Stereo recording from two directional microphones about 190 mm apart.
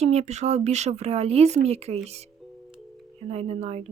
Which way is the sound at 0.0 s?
35° right (ahead or behind).